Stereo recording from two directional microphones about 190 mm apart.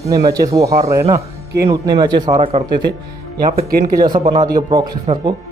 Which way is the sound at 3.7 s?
50° right (ahead or behind).